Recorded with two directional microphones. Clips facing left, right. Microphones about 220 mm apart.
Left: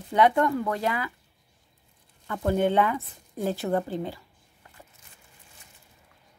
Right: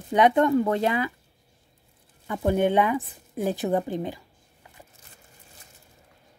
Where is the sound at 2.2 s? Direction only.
15° right (ahead or behind).